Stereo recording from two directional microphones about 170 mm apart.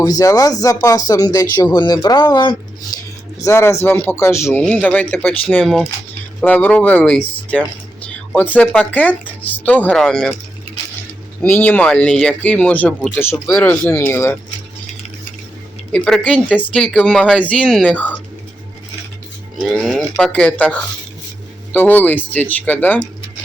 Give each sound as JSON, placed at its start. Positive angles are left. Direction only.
{"t": 0.0, "sound": "speech", "side_deg": 20}
{"t": 11.4, "sound": "speech", "side_deg": 10}
{"t": 15.9, "sound": "speech", "side_deg": 5}
{"t": 19.6, "sound": "speech", "side_deg": 0}